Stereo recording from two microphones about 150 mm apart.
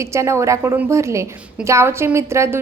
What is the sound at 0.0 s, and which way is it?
A woman's voice, 20° right (ahead or behind).